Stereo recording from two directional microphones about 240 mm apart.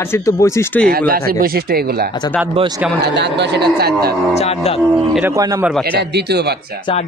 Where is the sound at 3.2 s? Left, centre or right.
Right.